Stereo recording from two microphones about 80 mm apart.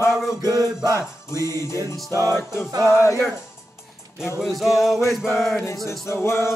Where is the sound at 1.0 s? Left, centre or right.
Left.